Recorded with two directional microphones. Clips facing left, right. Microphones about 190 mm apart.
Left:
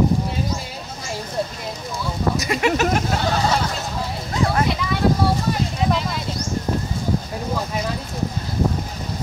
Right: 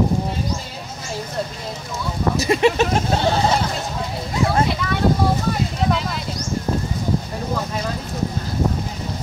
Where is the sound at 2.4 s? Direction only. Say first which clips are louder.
Right 5 dB; 25° right (ahead or behind).